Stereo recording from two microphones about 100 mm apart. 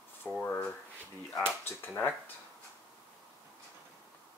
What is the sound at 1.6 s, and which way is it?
Speech, 20° left (ahead or behind).